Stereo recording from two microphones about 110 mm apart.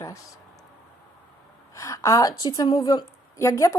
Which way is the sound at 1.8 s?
30° left (ahead or behind).